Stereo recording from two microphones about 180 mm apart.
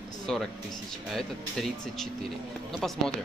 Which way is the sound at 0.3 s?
Centre (ahead or behind).